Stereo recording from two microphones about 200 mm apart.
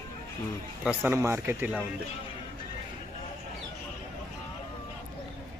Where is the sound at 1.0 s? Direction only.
15° right (ahead or behind).